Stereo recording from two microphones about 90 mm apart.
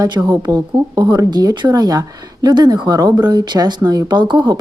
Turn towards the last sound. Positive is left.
turn(degrees=-60)  # may be behind; listen again after turning